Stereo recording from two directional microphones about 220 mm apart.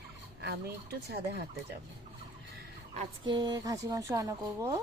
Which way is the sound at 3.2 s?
20° right (ahead or behind).